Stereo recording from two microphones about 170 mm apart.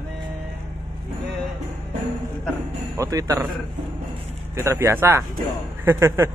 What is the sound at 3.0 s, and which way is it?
Speech, 20° right (ahead or behind).